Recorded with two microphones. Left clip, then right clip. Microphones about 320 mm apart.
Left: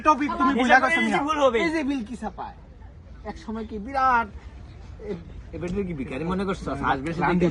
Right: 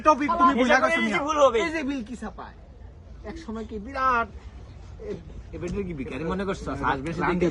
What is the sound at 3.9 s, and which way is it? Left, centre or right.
Speech, centre.